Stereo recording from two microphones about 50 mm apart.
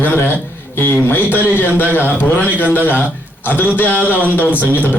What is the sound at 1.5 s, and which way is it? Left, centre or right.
A man's voice, left.